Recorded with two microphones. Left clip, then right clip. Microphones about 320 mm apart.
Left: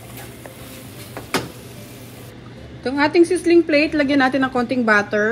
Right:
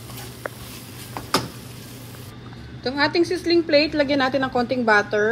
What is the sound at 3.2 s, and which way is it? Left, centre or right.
A woman's voice, left.